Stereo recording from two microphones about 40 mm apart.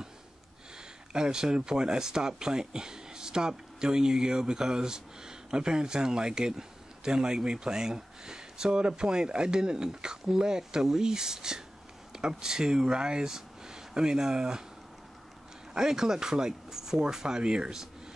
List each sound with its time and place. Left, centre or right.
1.1 s speech: centre
15.7 s speech: centre